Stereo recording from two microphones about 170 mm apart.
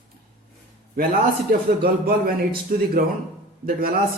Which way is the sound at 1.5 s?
60° right (ahead or behind).